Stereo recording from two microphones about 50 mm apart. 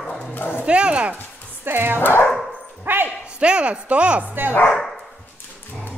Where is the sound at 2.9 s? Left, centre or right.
Right.